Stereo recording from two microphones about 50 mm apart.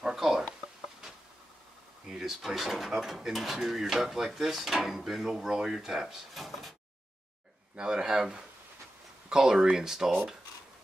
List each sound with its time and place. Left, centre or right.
0.0 s a sound: centre
2.0 s speech: centre
7.7 s speech: centre